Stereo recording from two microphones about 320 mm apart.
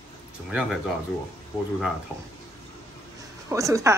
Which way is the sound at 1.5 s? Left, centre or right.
Centre.